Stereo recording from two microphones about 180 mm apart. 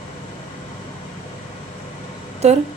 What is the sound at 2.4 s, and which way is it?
Speech, 40° right (ahead or behind).